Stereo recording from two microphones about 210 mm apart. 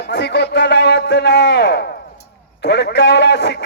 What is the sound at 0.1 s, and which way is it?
A man's voice, 55° left (ahead or behind).